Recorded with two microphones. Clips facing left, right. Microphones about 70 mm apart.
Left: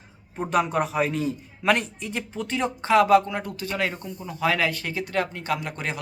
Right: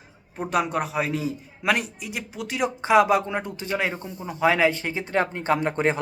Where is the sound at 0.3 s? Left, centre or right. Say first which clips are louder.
Left 1 dB; centre.